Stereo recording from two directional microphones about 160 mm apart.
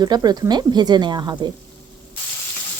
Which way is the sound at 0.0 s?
25° right (ahead or behind).